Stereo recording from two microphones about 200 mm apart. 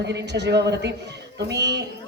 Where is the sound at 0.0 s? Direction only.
60° right (ahead or behind).